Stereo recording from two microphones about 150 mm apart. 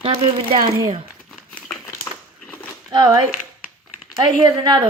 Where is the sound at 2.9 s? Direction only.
25° right (ahead or behind).